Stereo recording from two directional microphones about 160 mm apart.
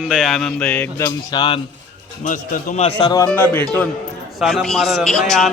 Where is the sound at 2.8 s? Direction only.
35° left (ahead or behind).